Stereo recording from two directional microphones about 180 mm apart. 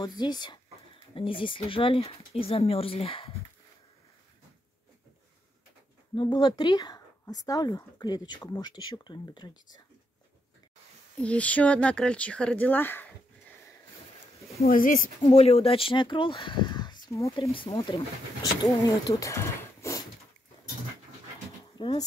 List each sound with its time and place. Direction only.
0.0 s speech: 25° left (ahead or behind)
6.1 s speech: 25° left (ahead or behind)
11.1 s speech: 5° left (ahead or behind)
14.6 s speech: 50° left (ahead or behind)
15.2 s speech: 35° left (ahead or behind)
17.4 s speech: 30° left (ahead or behind); by 20.0 s 15° left (ahead or behind)
21.7 s speech: 25° left (ahead or behind)